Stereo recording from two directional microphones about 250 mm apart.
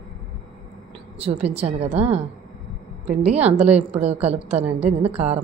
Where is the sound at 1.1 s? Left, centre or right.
Right.